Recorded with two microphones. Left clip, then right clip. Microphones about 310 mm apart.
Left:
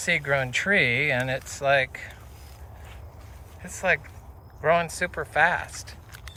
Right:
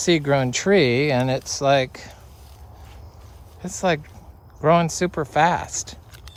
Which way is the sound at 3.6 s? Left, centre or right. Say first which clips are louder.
Right 2 dB; centre.